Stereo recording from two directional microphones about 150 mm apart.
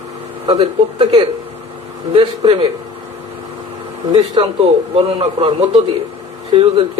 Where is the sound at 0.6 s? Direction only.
35° right (ahead or behind).